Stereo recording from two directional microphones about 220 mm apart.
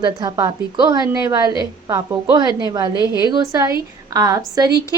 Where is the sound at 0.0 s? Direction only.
20° right (ahead or behind).